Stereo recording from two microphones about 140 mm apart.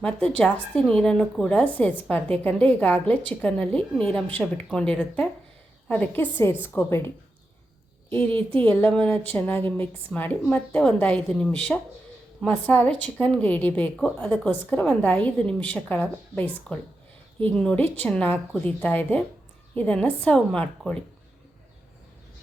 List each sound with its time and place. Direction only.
0.0 s a woman's voice: 5° left (ahead or behind)
8.1 s a woman's voice: 10° left (ahead or behind)